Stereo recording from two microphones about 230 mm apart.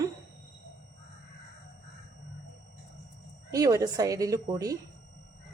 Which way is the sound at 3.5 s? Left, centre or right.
Centre.